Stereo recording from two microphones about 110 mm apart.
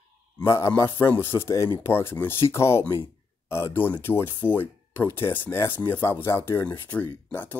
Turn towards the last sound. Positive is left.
turn(degrees=15)  # may be behind; listen again after turning